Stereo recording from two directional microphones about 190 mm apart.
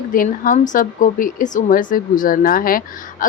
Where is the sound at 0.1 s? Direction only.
45° left (ahead or behind).